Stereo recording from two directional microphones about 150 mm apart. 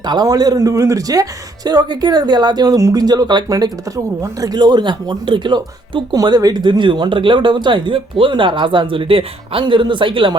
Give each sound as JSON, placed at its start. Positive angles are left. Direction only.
{"t": 0.0, "sound": "speech", "side_deg": -30}